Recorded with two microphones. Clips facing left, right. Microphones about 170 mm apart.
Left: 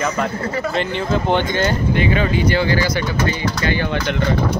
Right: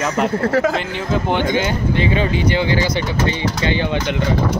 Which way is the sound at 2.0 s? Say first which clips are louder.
Right 1 dB; 25° right (ahead or behind).